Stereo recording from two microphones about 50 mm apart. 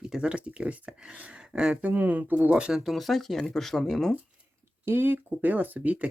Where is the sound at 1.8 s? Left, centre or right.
Right.